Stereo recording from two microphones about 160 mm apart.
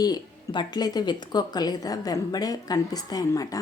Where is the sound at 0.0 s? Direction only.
25° left (ahead or behind).